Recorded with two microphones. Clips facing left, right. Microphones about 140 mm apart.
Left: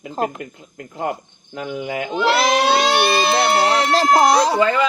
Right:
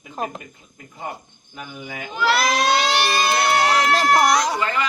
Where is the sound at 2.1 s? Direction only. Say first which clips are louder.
Left 2 dB; 25° left (ahead or behind).